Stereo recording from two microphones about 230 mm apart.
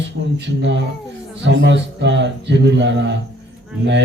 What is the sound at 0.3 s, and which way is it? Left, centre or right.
Speech, right.